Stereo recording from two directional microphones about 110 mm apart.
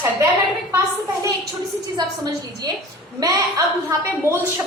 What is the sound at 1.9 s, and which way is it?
A woman's voice, 40° right (ahead or behind).